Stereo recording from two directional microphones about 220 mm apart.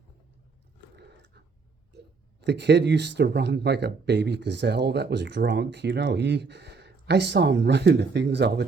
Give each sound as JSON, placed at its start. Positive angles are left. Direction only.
{"t": 0.9, "sound": "biting", "side_deg": -50}
{"t": 2.4, "sound": "speech", "side_deg": -50}